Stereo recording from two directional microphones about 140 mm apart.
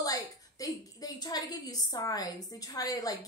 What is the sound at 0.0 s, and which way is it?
A woman's voice, 25° left (ahead or behind).